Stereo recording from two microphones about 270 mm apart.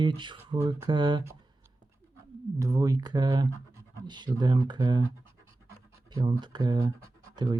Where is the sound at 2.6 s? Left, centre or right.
Centre.